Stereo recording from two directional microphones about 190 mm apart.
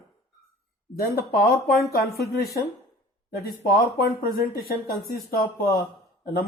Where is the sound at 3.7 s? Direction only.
50° left (ahead or behind).